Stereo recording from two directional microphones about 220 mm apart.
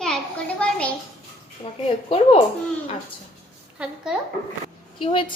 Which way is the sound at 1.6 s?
25° left (ahead or behind).